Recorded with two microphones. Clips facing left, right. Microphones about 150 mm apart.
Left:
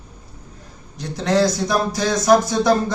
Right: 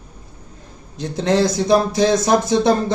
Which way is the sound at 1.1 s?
25° right (ahead or behind).